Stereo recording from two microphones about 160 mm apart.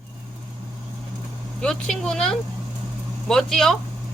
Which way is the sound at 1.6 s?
5° left (ahead or behind).